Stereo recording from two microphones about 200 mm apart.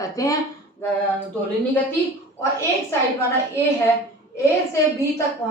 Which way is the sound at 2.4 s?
15° left (ahead or behind).